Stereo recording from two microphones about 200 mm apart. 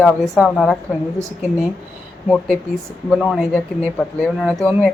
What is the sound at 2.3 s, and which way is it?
Speech, 5° left (ahead or behind).